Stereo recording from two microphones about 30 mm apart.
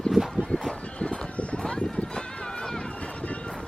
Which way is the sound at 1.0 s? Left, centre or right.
Left.